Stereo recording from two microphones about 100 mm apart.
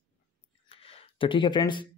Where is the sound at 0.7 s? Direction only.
75° left (ahead or behind); by 1.9 s 50° left (ahead or behind).